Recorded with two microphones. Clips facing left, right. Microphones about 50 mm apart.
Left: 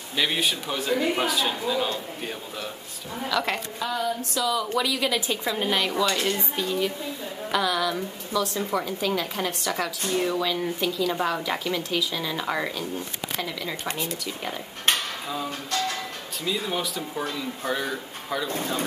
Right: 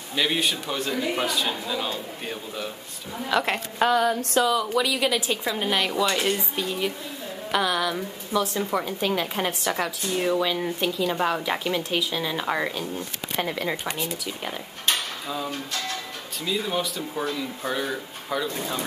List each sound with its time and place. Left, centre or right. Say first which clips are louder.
0.1 s a man's voice: right 1 dB; centre
3.8 s a sound: right 8 dB; right
4.5 s a man's voice: right 2 dB; centre
6.0 s speech: right 1 dB; centre
6.3 s a woman's voice: left 1 dB; centre
13.4 s speech: right 6 dB; right
13.8 s a man's voice: even; centre
14.9 s dishes: left 1 dB; left
15.2 s a man's voice: even; centre